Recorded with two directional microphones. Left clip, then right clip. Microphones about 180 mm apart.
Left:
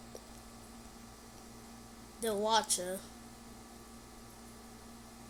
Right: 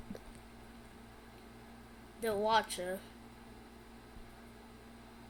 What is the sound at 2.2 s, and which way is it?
Speech, 10° left (ahead or behind).